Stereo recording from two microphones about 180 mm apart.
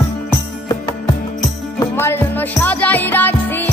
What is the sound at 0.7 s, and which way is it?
Music, 20° left (ahead or behind).